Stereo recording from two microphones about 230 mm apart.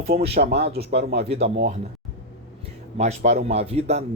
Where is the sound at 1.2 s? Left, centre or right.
Right.